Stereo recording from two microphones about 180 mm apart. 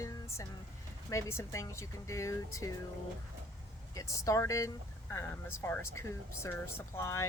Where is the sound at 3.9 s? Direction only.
20° left (ahead or behind).